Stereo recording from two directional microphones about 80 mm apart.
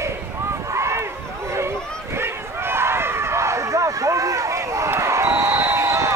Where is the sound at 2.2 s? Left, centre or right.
Right.